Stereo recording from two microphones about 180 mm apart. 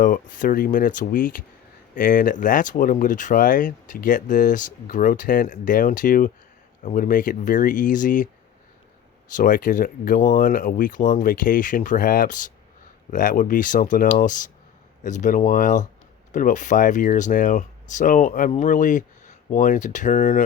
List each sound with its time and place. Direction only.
0.0 s speech: 50° left (ahead or behind)
9.3 s speech: 50° left (ahead or behind)